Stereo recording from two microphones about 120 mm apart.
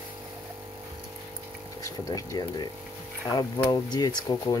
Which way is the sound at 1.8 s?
30° left (ahead or behind).